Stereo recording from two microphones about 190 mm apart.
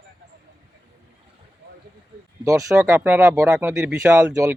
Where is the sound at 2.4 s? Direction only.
15° right (ahead or behind).